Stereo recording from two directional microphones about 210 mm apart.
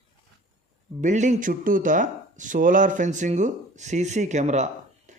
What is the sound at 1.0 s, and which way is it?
Speech, 35° right (ahead or behind).